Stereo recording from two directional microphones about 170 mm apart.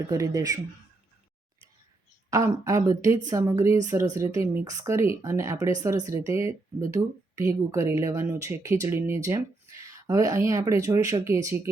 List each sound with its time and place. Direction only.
0.1 s speech: 20° right (ahead or behind)
2.3 s speech: 20° right (ahead or behind)